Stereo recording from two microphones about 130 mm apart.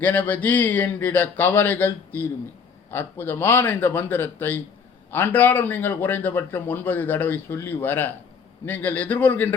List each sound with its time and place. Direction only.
0.0 s a man's voice: 15° left (ahead or behind)